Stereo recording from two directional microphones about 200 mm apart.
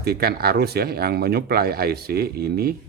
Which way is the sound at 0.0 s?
50° right (ahead or behind).